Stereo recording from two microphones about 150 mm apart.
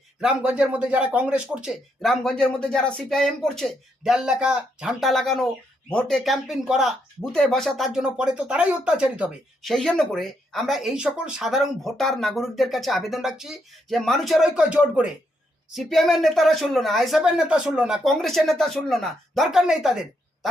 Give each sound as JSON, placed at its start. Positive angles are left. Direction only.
{"t": 0.2, "sound": "speech", "side_deg": -5}